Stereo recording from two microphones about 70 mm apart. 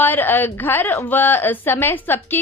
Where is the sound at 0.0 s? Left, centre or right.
Left.